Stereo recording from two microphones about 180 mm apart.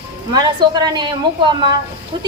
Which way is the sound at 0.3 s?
25° right (ahead or behind).